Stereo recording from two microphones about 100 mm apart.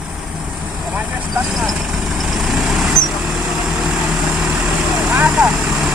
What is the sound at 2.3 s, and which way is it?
Vehicle, centre (ahead or behind).